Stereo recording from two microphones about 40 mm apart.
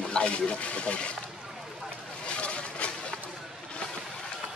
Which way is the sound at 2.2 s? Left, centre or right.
Left.